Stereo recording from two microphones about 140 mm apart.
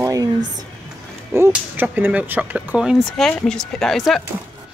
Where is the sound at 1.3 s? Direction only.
15° right (ahead or behind); by 4.2 s centre (ahead or behind).